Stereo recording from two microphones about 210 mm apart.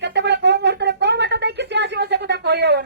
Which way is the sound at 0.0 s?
55° right (ahead or behind).